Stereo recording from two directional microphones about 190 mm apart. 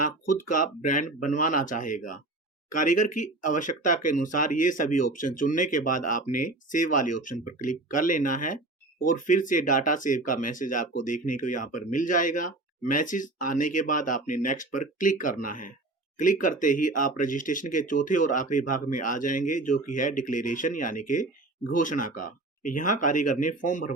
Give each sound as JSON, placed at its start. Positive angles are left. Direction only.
{"t": 0.4, "sound": "speech", "side_deg": 45}